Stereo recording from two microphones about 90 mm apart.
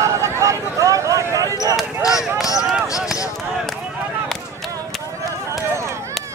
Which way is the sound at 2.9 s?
40° left (ahead or behind).